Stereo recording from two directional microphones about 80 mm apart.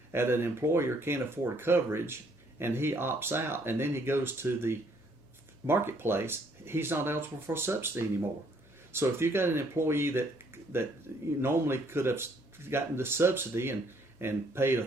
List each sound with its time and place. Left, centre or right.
0.1 s speech: right